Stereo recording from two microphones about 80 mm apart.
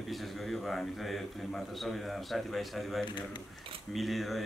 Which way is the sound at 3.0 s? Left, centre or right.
Left.